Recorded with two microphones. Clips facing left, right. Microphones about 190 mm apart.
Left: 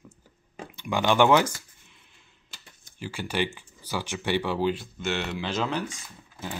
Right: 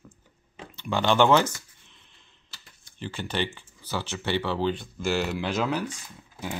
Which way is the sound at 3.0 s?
10° left (ahead or behind).